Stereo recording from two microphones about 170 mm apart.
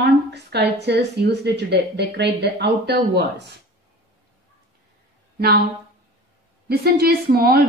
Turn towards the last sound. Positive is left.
turn(degrees=-60)  # may be behind; listen again after turning